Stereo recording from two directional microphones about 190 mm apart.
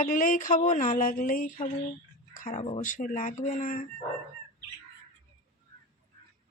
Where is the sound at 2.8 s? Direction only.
45° left (ahead or behind).